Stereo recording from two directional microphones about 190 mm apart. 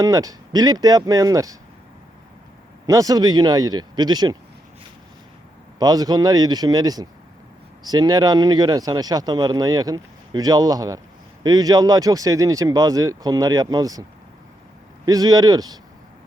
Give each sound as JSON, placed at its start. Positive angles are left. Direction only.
{"t": 0.0, "sound": "speech", "side_deg": -20}
{"t": 2.8, "sound": "speech", "side_deg": -20}
{"t": 5.8, "sound": "speech", "side_deg": -20}
{"t": 15.0, "sound": "speech", "side_deg": -20}